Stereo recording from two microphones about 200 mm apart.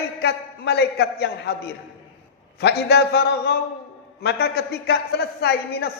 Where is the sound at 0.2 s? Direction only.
55° left (ahead or behind).